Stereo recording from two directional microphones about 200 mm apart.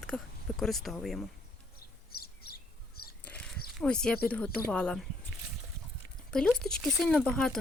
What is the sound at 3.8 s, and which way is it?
Speech, 5° left (ahead or behind).